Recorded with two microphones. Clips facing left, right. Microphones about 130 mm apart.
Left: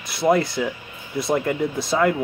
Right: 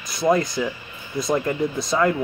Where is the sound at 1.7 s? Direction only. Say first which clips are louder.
Left 1 dB; 25° left (ahead or behind).